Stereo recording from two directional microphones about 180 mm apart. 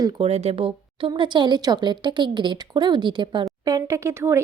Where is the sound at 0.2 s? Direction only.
35° right (ahead or behind).